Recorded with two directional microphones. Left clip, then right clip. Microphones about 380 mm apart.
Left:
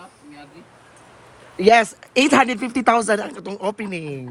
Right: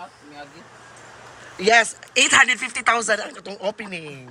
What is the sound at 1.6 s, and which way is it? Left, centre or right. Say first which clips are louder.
Speech: left 2 dB; centre.